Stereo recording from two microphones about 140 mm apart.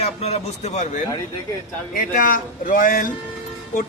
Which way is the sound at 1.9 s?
75° left (ahead or behind).